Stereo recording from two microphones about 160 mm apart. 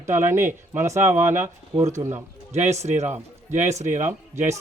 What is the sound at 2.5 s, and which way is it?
A man's voice, 45° right (ahead or behind).